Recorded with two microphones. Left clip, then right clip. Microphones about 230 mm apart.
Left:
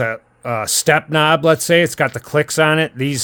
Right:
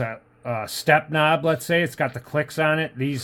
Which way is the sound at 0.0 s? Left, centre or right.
Left.